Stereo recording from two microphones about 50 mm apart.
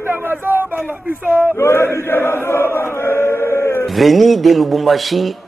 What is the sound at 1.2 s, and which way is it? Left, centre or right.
Speech, right.